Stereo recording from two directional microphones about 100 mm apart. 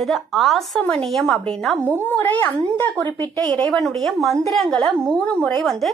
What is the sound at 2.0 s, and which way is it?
Speech, 20° left (ahead or behind).